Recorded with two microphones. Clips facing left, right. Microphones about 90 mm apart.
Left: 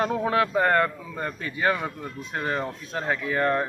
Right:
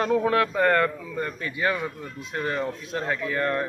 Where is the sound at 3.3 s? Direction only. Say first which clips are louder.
Left 3 dB; 30° left (ahead or behind).